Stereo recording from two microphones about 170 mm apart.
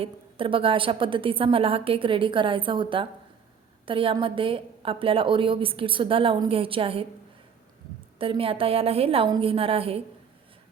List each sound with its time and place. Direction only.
0.0 s a woman's voice: 30° right (ahead or behind)
8.2 s a woman's voice: 35° right (ahead or behind)